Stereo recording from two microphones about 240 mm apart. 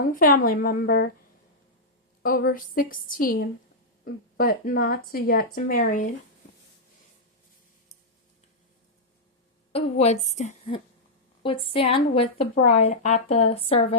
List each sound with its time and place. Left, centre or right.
0.0 s a woman's voice: left
2.2 s a woman's voice: left
9.7 s speech: left